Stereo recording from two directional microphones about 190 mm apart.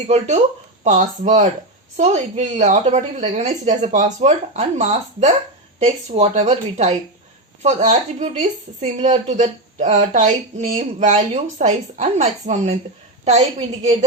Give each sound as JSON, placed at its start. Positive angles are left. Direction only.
{"t": 0.1, "sound": "a woman's voice", "side_deg": -35}